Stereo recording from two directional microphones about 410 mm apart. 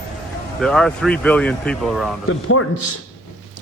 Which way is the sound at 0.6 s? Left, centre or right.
Centre.